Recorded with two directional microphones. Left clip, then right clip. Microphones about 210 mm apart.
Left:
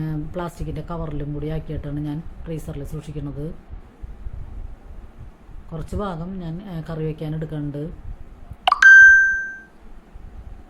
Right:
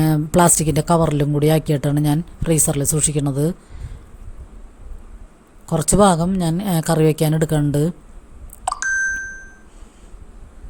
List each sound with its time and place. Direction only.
0.0 s speech: 50° right (ahead or behind)
5.7 s speech: 45° right (ahead or behind)
8.6 s beep: 5° left (ahead or behind)